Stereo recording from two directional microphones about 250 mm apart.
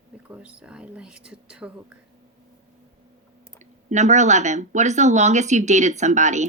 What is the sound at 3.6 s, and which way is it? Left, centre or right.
Speech, right.